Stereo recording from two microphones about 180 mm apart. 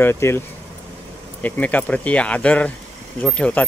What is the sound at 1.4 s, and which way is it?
Speech, 10° left (ahead or behind).